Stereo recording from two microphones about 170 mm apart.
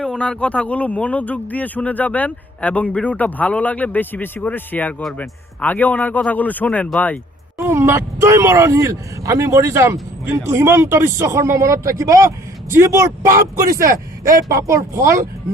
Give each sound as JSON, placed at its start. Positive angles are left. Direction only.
{"t": 0.0, "sound": "a man's voice", "side_deg": 5}
{"t": 7.6, "sound": "speech", "side_deg": -15}
{"t": 14.7, "sound": "speech", "side_deg": -15}